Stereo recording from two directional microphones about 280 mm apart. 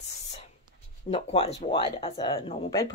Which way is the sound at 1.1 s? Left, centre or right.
Left.